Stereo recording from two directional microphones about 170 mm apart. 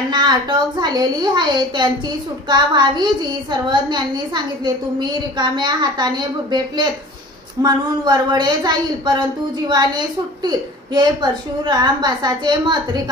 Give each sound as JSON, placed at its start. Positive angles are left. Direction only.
{"t": 0.1, "sound": "a woman's voice", "side_deg": -25}
{"t": 5.0, "sound": "a woman's voice", "side_deg": -25}
{"t": 7.6, "sound": "a woman's voice", "side_deg": -25}